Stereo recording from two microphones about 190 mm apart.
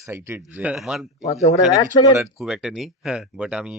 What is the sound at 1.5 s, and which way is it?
Speech, 15° left (ahead or behind).